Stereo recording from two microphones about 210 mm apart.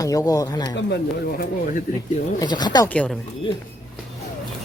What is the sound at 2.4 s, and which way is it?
Speech, 20° left (ahead or behind).